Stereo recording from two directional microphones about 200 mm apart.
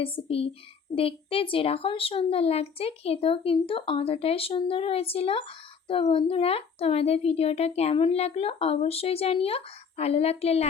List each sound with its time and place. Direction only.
0.0 s speech: 30° left (ahead or behind)